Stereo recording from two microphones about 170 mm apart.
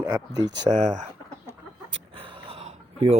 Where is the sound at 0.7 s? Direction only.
45° right (ahead or behind).